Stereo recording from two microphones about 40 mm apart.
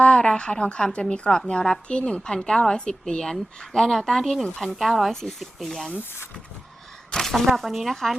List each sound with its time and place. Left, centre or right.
0.0 s a woman's voice: left; by 5.1 s centre
5.1 s speech: centre
5.5 s speech: centre
7.1 s speech: centre